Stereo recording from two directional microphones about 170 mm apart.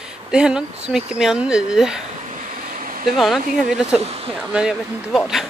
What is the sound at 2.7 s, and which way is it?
Vehicle, 55° right (ahead or behind).